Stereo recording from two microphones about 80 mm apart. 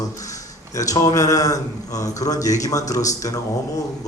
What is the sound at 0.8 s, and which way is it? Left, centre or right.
A man's voice, left.